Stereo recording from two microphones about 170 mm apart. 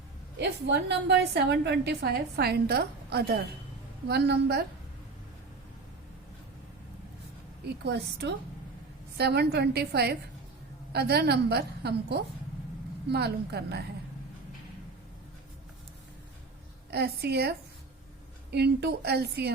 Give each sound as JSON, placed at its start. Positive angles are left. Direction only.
{"t": 0.3, "sound": "a woman's voice", "side_deg": -80}
{"t": 7.6, "sound": "a woman's voice", "side_deg": -75}
{"t": 16.9, "sound": "a woman's voice", "side_deg": -70}
{"t": 18.5, "sound": "a woman's voice", "side_deg": -75}